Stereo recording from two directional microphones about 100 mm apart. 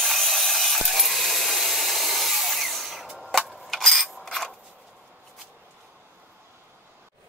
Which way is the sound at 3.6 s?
Centre (ahead or behind).